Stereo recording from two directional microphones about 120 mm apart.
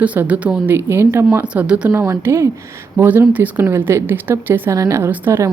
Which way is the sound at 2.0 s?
25° right (ahead or behind).